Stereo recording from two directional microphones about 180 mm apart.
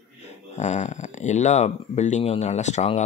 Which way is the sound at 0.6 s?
40° left (ahead or behind).